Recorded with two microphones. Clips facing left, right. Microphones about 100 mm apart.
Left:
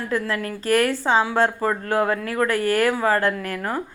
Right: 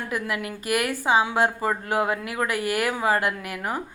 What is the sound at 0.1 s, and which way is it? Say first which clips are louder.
A woman's voice: left 5 dB; 15° right (ahead or behind).